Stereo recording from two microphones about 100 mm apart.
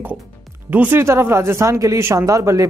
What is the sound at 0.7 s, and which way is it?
Speech, 20° right (ahead or behind).